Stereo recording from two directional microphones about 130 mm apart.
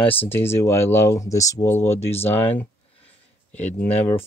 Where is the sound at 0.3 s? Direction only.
20° left (ahead or behind).